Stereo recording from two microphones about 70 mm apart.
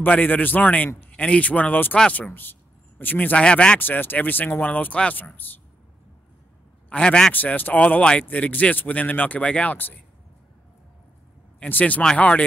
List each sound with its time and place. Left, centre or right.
0.0 s speech: left
3.3 s speech: centre
3.8 s speech: left
6.9 s speech: centre
7.3 s speech: left
11.6 s speech: centre